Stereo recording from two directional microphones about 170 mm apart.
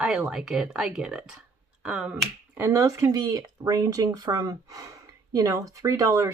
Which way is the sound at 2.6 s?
20° right (ahead or behind).